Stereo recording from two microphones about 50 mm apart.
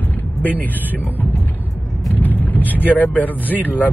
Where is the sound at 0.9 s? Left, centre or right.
Left.